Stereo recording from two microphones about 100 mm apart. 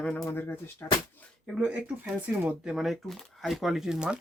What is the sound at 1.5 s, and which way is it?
Speech, 10° right (ahead or behind).